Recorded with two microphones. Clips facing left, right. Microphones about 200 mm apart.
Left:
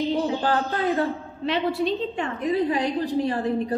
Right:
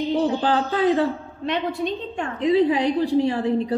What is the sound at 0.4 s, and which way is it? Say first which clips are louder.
Speech: right 3 dB; 15° right (ahead or behind).